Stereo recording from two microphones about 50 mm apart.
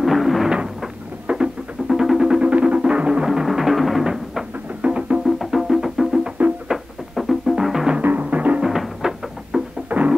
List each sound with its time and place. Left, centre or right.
0.0 s a sound: centre
1.2 s music: centre
2.4 s music: right
3.3 s music: centre
4.8 s music: right
5.2 s music: centre
8.0 s music: right
8.6 s music: centre
9.8 s music: right